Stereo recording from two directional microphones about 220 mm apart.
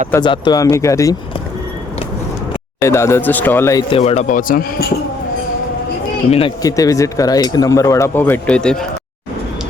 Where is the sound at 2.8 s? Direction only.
10° left (ahead or behind); by 4.8 s 40° left (ahead or behind).